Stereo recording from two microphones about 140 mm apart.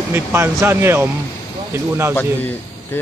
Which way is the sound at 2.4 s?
15° left (ahead or behind).